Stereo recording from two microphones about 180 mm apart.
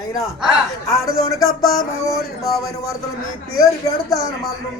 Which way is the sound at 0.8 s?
20° left (ahead or behind).